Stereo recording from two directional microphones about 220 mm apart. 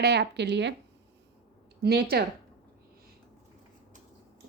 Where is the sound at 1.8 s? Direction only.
45° right (ahead or behind).